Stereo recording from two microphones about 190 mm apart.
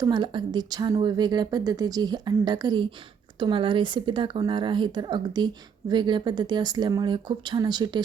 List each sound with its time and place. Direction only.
0.0 s speech: 25° right (ahead or behind)